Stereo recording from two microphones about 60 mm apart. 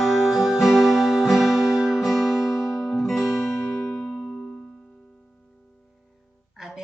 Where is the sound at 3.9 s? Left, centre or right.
Centre.